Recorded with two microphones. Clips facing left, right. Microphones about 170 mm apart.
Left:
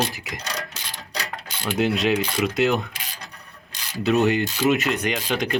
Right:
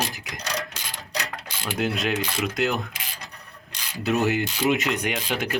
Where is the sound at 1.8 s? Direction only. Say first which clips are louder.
Left 4 dB; centre (ahead or behind).